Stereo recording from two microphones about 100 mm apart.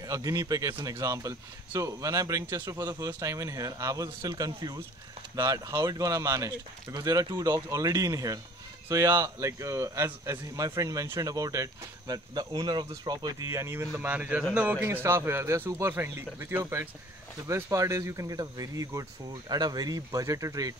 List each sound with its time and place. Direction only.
0.0 s a man's voice: 35° right (ahead or behind)
2.9 s a man's voice: 30° right (ahead or behind)